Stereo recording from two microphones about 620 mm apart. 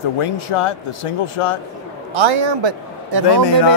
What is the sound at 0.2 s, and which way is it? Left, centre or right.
Speech, left.